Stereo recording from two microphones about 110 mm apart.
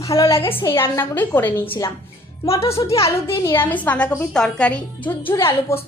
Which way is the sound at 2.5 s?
60° left (ahead or behind).